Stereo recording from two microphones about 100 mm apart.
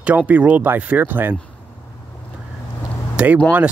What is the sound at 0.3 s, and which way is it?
Speech, 15° right (ahead or behind).